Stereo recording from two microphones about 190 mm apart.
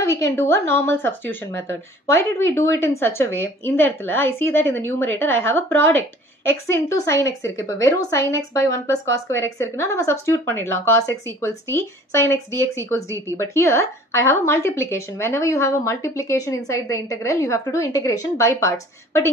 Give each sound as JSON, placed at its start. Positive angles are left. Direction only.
{"t": 0.2, "sound": "a woman's voice", "side_deg": 10}
{"t": 10.7, "sound": "a woman's voice", "side_deg": -90}
{"t": 11.1, "sound": "a woman's voice", "side_deg": 15}